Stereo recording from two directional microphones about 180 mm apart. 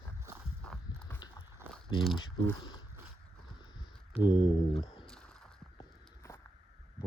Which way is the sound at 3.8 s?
25° left (ahead or behind).